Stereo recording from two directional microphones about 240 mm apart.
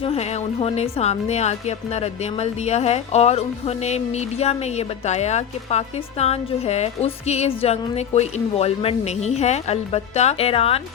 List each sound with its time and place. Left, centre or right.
0.0 s speech: left